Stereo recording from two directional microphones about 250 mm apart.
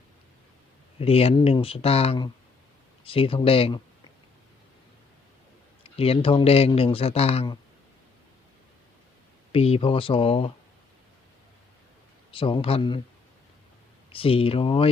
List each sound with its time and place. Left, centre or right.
0.9 s speech: left
5.8 s speech: left
9.5 s speech: left
12.3 s speech: centre
14.1 s speech: left